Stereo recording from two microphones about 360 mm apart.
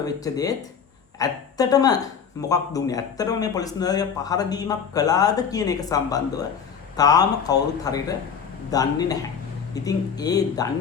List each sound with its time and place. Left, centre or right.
0.0 s a man's voice: centre